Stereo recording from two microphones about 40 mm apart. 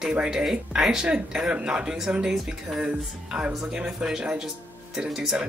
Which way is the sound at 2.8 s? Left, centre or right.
Right.